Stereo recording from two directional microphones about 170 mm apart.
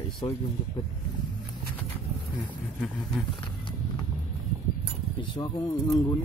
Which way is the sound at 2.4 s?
5° left (ahead or behind).